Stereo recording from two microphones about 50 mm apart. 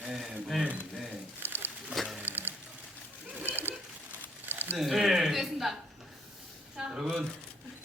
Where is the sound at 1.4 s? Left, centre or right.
Right.